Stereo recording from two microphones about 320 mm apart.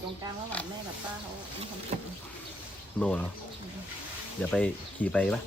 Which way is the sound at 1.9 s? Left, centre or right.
Right.